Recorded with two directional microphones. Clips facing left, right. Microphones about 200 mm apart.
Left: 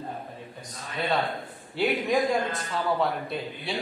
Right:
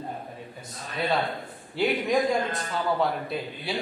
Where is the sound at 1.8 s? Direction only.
Centre (ahead or behind).